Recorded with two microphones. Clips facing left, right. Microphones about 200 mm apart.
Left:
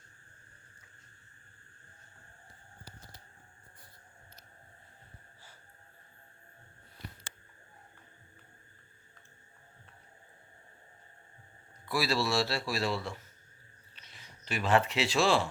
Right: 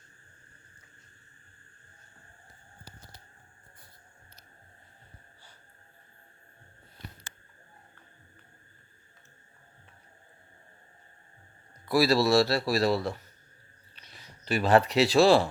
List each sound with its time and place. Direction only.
11.9 s a man's voice: 40° right (ahead or behind)